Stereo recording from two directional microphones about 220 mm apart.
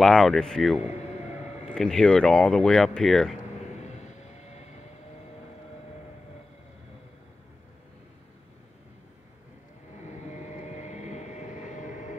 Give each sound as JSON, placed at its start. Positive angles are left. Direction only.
{"t": 0.0, "sound": "speech", "side_deg": 0}
{"t": 10.0, "sound": "vehicle", "side_deg": 30}